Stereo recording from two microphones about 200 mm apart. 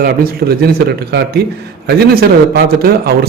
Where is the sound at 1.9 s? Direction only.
50° right (ahead or behind).